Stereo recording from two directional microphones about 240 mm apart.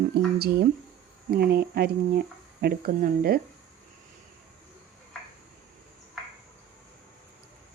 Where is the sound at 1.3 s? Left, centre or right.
Right.